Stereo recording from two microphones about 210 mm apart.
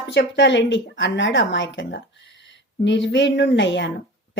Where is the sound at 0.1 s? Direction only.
55° left (ahead or behind).